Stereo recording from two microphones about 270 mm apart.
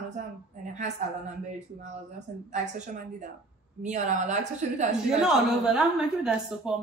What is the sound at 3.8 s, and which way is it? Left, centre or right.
Speech, right.